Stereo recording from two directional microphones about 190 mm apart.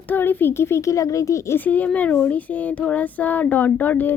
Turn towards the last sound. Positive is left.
turn(degrees=10)  # may be behind; listen again after turning